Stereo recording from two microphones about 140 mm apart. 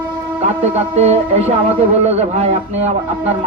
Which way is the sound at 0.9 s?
50° right (ahead or behind).